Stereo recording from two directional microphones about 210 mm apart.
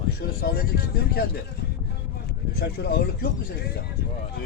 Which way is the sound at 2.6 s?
50° left (ahead or behind).